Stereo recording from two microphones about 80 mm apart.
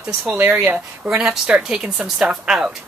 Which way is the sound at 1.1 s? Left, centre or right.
Centre.